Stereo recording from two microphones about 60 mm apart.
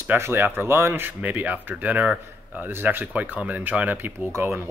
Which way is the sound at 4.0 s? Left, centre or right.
Right.